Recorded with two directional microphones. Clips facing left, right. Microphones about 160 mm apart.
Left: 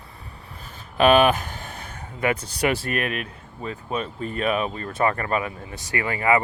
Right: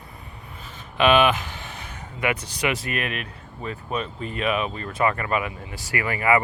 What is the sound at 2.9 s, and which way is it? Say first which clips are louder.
Speech: left 2 dB; 40° left (ahead or behind).